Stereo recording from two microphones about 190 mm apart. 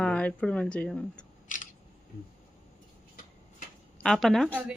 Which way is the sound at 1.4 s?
45° left (ahead or behind).